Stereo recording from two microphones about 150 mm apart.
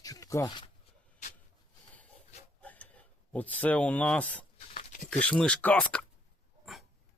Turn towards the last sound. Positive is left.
turn(degrees=0)  # may be behind; listen again after turning